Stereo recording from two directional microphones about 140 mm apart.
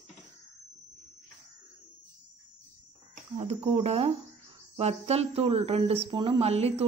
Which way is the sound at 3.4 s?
45° right (ahead or behind).